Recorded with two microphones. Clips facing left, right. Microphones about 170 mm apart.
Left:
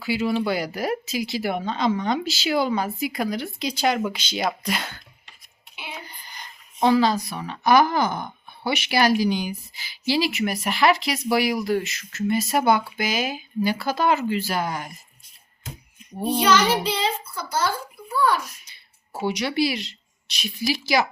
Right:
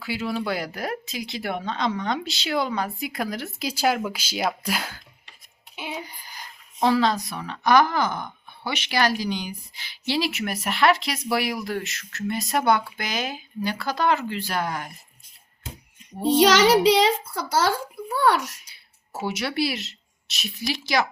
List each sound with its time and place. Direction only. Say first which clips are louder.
0.0 s speech: left 4 dB; centre (ahead or behind)
5.9 s a sound: right 3 dB; 10° right (ahead or behind)
6.7 s speech: left 2 dB; centre (ahead or behind)
16.3 s a child's voice: right 4 dB; 90° right
19.1 s speech: left 3 dB; 5° right (ahead or behind)